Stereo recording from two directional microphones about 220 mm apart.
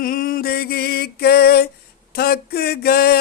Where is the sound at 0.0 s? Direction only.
40° left (ahead or behind).